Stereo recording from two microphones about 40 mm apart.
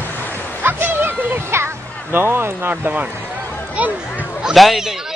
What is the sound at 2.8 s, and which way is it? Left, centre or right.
Speech, right.